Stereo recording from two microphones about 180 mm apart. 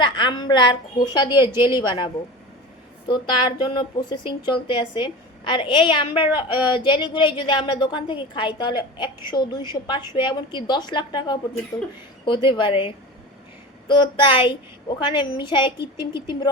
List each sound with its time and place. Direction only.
0.0 s a woman's voice: 25° left (ahead or behind)
3.1 s a woman's voice: 25° left (ahead or behind)